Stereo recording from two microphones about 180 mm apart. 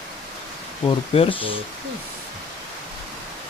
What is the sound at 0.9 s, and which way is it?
Speech, 30° left (ahead or behind).